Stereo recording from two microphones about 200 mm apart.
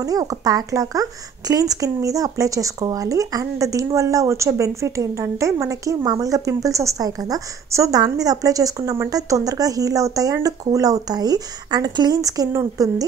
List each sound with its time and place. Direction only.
0.0 s speech: 20° right (ahead or behind)